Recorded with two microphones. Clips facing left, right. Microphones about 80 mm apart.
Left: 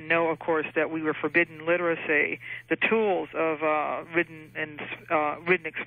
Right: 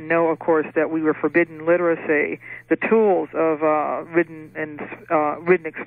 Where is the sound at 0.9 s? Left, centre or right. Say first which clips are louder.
Right 8 dB; centre.